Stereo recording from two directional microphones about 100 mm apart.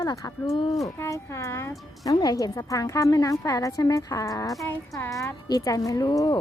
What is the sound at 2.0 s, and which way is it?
A woman's voice, 40° left (ahead or behind).